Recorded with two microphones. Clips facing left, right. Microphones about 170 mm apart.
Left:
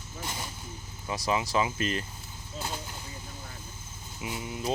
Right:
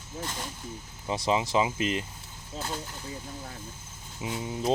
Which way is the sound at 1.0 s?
25° right (ahead or behind).